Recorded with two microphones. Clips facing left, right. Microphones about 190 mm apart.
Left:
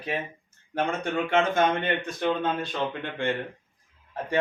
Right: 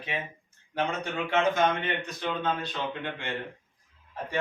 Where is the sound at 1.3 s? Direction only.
55° left (ahead or behind).